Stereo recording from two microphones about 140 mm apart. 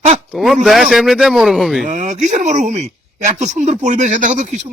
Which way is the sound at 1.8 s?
60° right (ahead or behind).